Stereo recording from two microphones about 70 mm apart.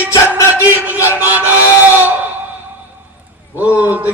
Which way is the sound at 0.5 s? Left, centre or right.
Right.